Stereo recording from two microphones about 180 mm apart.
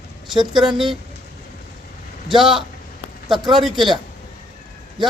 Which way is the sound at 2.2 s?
Centre (ahead or behind).